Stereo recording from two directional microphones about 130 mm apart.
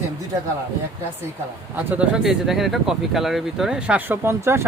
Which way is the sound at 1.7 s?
10° right (ahead or behind).